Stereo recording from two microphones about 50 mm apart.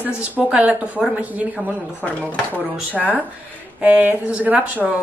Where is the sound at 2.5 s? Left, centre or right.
Right.